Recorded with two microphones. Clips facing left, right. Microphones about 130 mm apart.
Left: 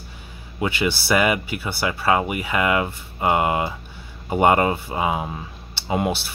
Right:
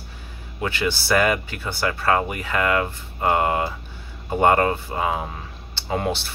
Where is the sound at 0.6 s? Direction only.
15° left (ahead or behind).